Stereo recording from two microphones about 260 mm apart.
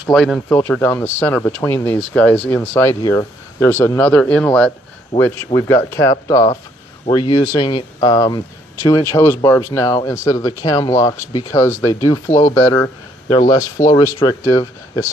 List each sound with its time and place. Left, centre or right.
0.1 s speech: centre